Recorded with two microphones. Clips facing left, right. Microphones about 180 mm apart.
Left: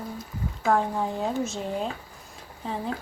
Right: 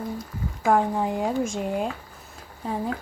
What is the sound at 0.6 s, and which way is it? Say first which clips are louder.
Speech: right 3 dB; 15° right (ahead or behind).